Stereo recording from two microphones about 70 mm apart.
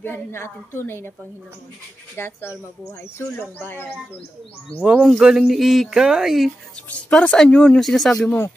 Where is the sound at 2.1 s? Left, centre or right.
Left.